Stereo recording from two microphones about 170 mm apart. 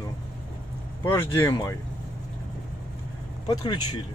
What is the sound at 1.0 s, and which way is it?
Speech, 15° left (ahead or behind).